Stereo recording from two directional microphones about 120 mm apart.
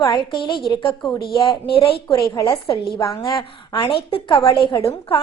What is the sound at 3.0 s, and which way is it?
Speech, 30° left (ahead or behind).